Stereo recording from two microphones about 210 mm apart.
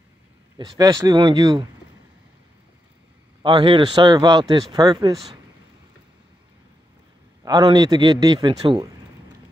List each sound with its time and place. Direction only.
0.6 s speech: 20° right (ahead or behind)
3.4 s speech: 25° right (ahead or behind)
7.4 s speech: 20° right (ahead or behind)